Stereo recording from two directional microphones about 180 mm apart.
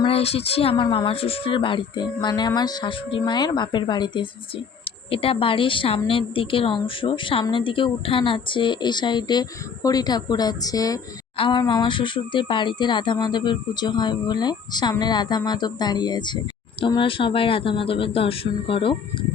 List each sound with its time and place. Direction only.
0.0 s a woman's voice: 35° left (ahead or behind)